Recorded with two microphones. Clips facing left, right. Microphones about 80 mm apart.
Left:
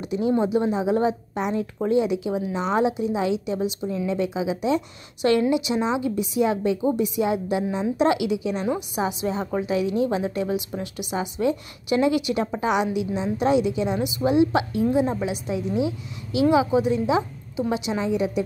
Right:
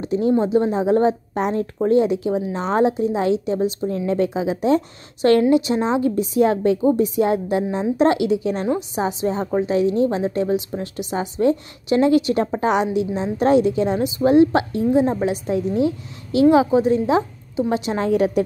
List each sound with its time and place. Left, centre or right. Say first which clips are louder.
0.1 s a woman's voice: right 4 dB; right
17.9 s a woman's voice: right 7 dB; right